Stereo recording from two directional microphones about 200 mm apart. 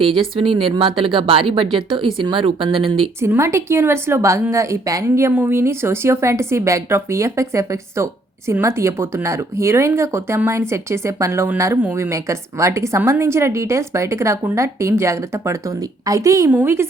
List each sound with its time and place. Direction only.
0.0 s speech: 25° right (ahead or behind)
3.2 s a woman's voice: 10° right (ahead or behind)